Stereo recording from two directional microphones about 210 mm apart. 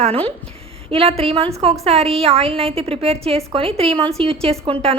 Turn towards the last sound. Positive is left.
turn(degrees=-25)  # may be behind; listen again after turning